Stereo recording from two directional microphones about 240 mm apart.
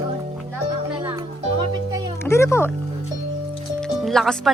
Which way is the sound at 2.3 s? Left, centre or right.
Centre.